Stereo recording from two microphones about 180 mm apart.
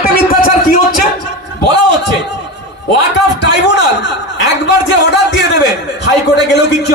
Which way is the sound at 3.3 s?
75° left (ahead or behind).